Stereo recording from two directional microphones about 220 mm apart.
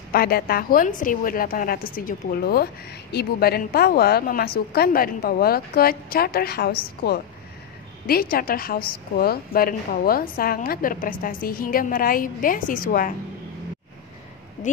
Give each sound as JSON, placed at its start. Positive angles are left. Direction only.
{"t": 0.1, "sound": "a woman's voice", "side_deg": 45}
{"t": 8.1, "sound": "a woman's voice", "side_deg": 40}